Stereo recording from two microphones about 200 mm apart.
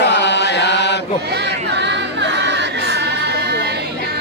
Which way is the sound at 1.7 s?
60° right (ahead or behind).